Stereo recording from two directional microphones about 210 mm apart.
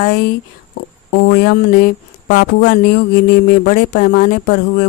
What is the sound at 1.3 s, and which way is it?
Speech, 50° left (ahead or behind).